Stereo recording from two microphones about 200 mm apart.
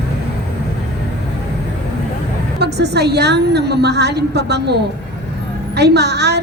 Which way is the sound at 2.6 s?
55° right (ahead or behind).